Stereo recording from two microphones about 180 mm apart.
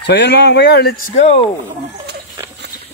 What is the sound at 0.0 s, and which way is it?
Speech, 70° left (ahead or behind).